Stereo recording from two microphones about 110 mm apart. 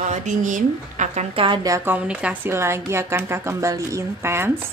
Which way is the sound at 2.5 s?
25° right (ahead or behind).